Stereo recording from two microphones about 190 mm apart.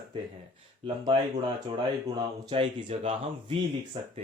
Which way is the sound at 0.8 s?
25° right (ahead or behind).